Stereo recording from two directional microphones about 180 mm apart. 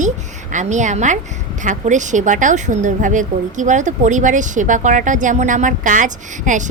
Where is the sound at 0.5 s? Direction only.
40° right (ahead or behind).